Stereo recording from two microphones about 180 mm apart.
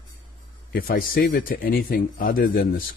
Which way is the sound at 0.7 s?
50° left (ahead or behind).